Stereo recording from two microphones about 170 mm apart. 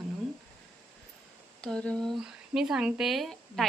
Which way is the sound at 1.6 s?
5° left (ahead or behind).